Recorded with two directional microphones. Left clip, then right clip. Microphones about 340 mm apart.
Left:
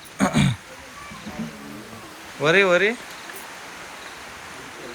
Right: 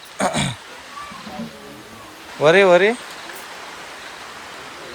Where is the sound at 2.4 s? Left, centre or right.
Centre.